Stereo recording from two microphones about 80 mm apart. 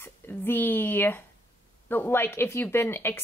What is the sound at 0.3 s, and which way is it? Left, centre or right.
A woman's voice, left.